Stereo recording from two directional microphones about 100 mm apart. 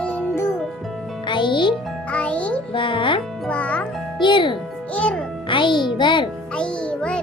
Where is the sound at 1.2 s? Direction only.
55° left (ahead or behind).